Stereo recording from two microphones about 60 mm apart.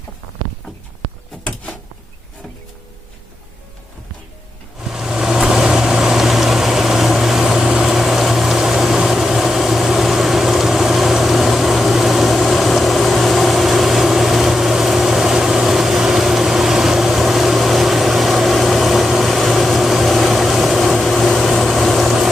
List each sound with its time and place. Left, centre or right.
4.8 s vehicle: centre